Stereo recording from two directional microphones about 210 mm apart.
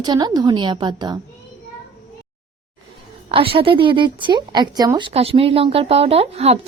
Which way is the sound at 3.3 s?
25° right (ahead or behind).